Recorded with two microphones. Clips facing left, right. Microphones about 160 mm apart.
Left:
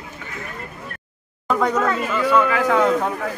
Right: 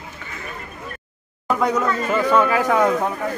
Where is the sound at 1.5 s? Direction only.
5° right (ahead or behind).